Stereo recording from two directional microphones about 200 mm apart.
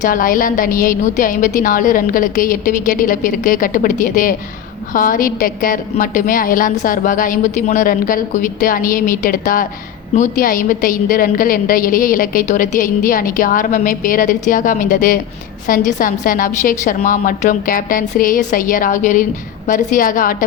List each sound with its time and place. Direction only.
0.0 s a woman's voice: 45° left (ahead or behind)